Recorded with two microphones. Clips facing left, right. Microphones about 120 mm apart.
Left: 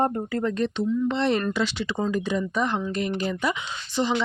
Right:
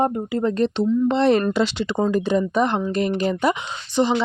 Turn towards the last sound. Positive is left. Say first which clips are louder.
# right 5 dB
turn(degrees=-20)  # may be behind; listen again after turning